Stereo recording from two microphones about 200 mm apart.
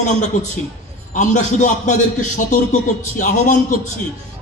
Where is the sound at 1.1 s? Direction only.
40° left (ahead or behind).